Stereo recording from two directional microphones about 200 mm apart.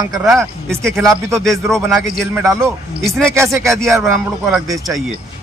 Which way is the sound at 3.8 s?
Centre (ahead or behind).